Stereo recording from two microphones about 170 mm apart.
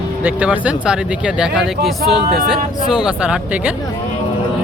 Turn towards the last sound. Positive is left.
turn(degrees=-5)  # may be behind; listen again after turning